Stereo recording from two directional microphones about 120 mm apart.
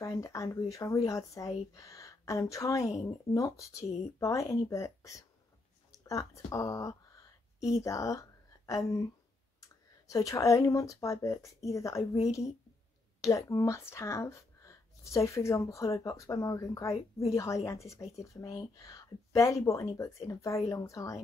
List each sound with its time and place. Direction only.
0.0 s a woman's voice: 25° left (ahead or behind)
13.2 s speech: 25° left (ahead or behind)
16.9 s a woman's voice: 55° left (ahead or behind)
17.6 s speech: 25° left (ahead or behind)